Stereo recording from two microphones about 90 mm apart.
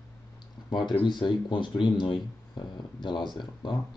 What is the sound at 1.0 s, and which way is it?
Speech, 60° left (ahead or behind).